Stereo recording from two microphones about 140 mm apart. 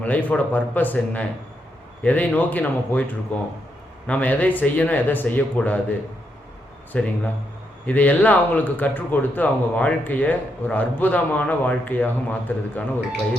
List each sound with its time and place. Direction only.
0.0 s speech: 10° left (ahead or behind)
6.9 s speech: 10° left (ahead or behind)